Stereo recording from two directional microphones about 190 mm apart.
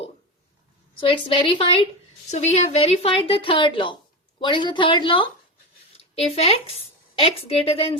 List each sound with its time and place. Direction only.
0.9 s a woman's voice: 25° left (ahead or behind)